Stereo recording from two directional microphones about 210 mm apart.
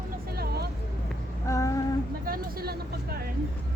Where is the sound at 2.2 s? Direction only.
45° right (ahead or behind).